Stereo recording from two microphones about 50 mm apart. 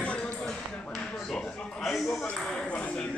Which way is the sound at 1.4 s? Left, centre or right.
Centre.